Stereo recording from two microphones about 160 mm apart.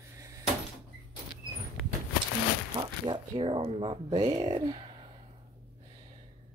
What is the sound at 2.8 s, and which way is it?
Speech, 30° right (ahead or behind).